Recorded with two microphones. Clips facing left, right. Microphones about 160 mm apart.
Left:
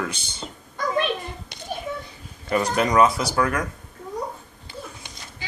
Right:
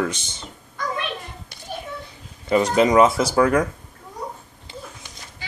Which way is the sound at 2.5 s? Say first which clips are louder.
Right 4 dB; 20° right (ahead or behind).